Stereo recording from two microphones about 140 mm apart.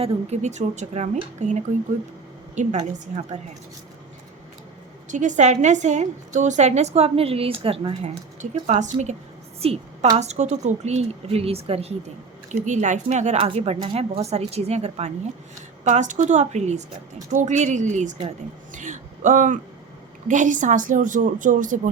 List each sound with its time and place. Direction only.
0.0 s a woman's voice: 55° right (ahead or behind)
5.0 s a woman's voice: 65° right (ahead or behind); by 11.9 s 45° right (ahead or behind)
12.5 s a woman's voice: 60° right (ahead or behind)
13.4 s speech: 45° right (ahead or behind)
15.8 s a woman's voice: 60° right (ahead or behind)